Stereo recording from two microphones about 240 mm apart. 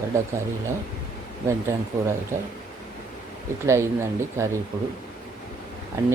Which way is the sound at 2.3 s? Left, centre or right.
Centre.